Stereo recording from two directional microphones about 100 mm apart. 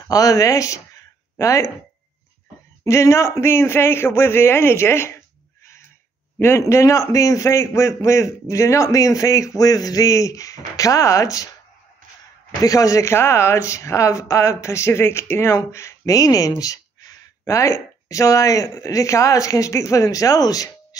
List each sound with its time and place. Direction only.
0.1 s speech: 35° left (ahead or behind)
2.8 s speech: 30° left (ahead or behind)
6.7 s speech: 30° left (ahead or behind)
12.6 s speech: 35° left (ahead or behind)